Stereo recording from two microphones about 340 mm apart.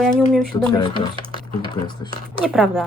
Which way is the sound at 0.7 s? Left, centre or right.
Centre.